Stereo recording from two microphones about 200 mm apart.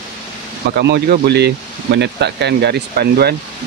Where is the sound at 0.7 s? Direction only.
50° right (ahead or behind).